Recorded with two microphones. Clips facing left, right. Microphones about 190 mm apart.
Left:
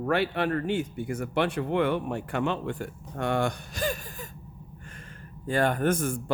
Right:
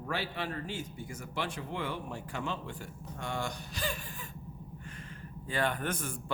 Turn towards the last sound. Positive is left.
turn(degrees=45)  # may be behind; listen again after turning